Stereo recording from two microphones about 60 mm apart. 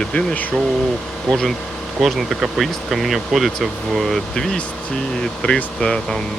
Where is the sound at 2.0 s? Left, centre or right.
Centre.